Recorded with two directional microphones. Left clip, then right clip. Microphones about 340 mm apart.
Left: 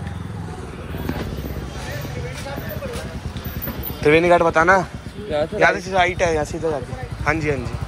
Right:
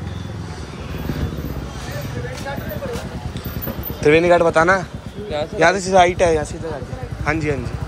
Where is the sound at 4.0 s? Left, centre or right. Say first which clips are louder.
Right 1 dB; centre.